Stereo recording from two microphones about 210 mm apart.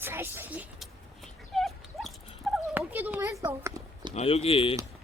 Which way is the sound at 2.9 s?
10° right (ahead or behind).